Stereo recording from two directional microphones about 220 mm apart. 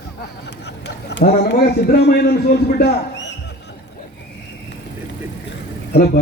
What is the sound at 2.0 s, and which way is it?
A man's voice, 50° left (ahead or behind).